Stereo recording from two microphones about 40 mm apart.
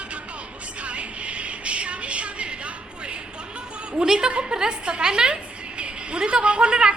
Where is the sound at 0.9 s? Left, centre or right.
Right.